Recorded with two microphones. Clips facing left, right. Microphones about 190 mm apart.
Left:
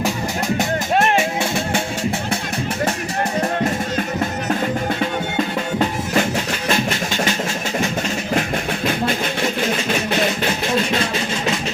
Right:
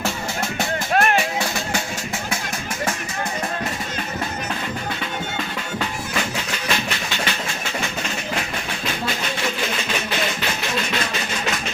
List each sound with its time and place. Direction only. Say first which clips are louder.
0.6 s music: left 1 dB; 25° left (ahead or behind)
5.8 s music: left 7 dB; 40° left (ahead or behind)
10.8 s music: left 5 dB; 30° left (ahead or behind)